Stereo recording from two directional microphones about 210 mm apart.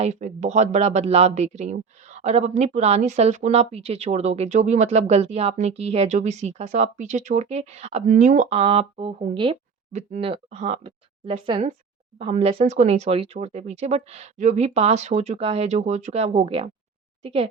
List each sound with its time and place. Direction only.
0.0 s speech: 35° right (ahead or behind)